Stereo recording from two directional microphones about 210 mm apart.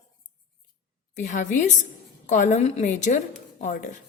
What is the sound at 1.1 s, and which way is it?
A woman's voice, 35° left (ahead or behind).